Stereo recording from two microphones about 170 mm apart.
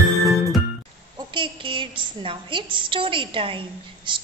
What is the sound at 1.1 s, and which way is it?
A woman's voice, 30° right (ahead or behind).